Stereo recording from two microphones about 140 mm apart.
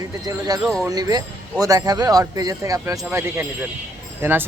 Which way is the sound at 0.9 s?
25° right (ahead or behind).